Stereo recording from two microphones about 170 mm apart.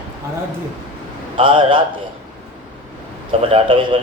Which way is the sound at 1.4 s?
30° right (ahead or behind).